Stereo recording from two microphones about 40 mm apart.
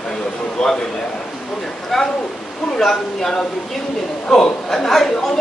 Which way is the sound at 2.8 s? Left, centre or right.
Centre.